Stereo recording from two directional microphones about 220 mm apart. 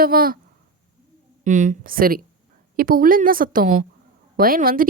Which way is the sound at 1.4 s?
35° right (ahead or behind).